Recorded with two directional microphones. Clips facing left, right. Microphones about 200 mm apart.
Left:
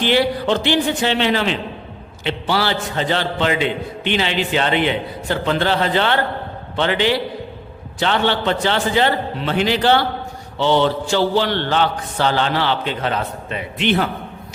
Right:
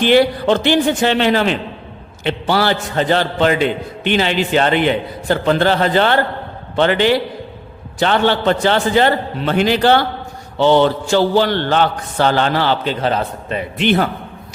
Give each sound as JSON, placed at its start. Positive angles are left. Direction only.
{"t": 0.0, "sound": "a man's voice", "side_deg": -50}